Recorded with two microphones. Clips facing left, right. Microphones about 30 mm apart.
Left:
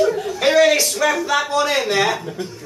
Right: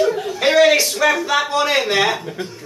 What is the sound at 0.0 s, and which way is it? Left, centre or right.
A man's voice, centre.